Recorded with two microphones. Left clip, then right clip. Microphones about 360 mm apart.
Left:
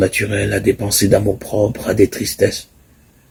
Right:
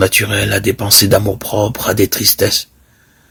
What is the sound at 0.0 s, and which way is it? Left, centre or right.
Speech, right.